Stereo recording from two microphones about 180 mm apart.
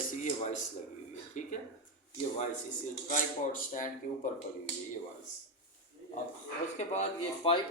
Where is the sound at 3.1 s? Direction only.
50° left (ahead or behind).